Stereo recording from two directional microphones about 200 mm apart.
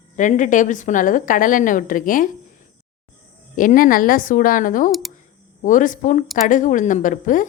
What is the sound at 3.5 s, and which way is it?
A woman's voice, 40° left (ahead or behind).